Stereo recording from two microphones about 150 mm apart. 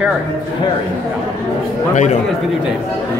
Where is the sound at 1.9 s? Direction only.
50° left (ahead or behind).